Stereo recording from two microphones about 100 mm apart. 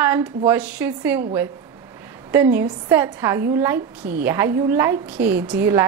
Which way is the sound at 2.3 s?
25° right (ahead or behind).